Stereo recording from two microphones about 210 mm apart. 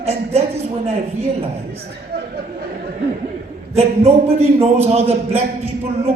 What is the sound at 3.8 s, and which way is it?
A man's voice, 30° right (ahead or behind).